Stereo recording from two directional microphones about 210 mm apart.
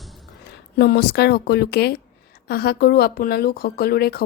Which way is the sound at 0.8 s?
50° left (ahead or behind).